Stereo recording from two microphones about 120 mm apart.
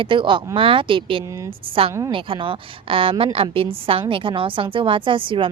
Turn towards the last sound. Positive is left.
turn(degrees=-45)  # may be behind; listen again after turning